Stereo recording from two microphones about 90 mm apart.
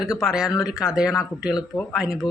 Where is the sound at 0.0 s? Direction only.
5° right (ahead or behind).